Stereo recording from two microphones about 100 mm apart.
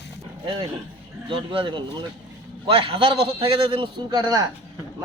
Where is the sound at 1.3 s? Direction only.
55° right (ahead or behind).